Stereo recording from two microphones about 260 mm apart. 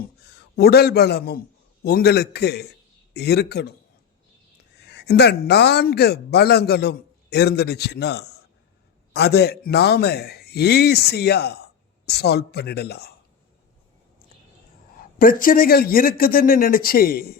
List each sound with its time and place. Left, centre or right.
0.3 s a man's voice: left
4.8 s speech: left
15.2 s speech: left